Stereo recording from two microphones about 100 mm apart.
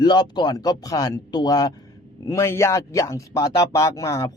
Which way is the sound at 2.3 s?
30° left (ahead or behind).